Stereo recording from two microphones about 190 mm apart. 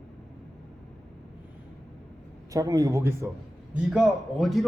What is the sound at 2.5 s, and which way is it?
Speech, 20° right (ahead or behind).